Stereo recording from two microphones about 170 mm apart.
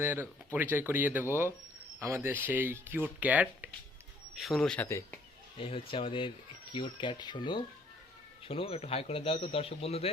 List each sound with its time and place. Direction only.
0.0 s speech: 10° right (ahead or behind); by 4.9 s 5° left (ahead or behind)
5.5 s speech: 30° left (ahead or behind)